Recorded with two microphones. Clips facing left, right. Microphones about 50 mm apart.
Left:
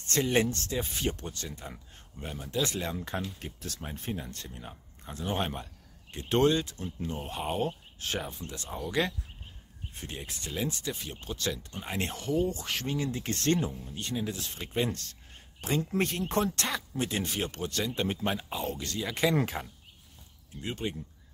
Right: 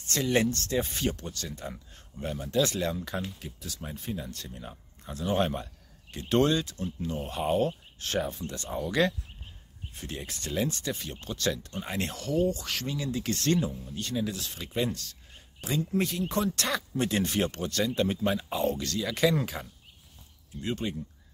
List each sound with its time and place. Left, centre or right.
0.1 s speech: left
0.7 s speech: centre
1.1 s speech: left
3.3 s speech: left
4.6 s speech: centre
5.3 s speech: centre; by 7.3 s left
7.3 s speech: centre
10.1 s speech: centre
12.0 s speech: left
15.6 s speech: left
16.7 s speech: centre; by 18.5 s left
18.5 s speech: centre
18.8 s speech: left
20.6 s speech: centre